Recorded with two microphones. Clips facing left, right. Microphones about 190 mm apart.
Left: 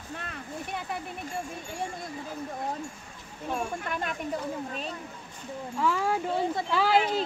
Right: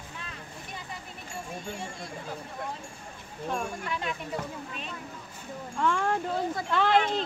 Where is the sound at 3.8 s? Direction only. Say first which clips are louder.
Left 1 dB; 50° left (ahead or behind).